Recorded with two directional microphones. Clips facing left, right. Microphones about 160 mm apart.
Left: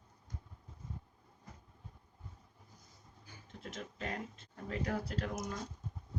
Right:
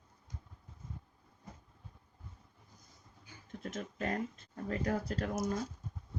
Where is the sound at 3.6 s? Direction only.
45° right (ahead or behind).